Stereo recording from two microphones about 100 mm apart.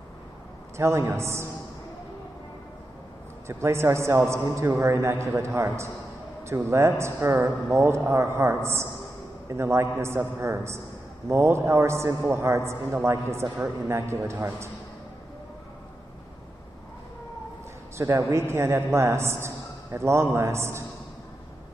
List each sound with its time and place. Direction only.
0.7 s a man's voice: 30° right (ahead or behind)
3.4 s a man's voice: 25° right (ahead or behind)
17.9 s a man's voice: 30° right (ahead or behind)